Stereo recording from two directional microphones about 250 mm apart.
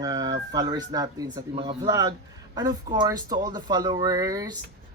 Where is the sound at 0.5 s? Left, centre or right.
Centre.